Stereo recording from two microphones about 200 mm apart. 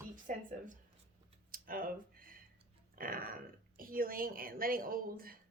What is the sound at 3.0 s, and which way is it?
A woman's voice, 45° right (ahead or behind).